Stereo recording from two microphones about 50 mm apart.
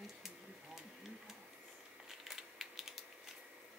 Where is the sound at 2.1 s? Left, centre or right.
Centre.